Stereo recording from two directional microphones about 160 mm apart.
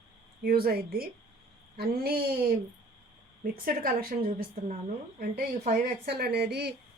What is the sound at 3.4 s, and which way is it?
Speech, 60° right (ahead or behind).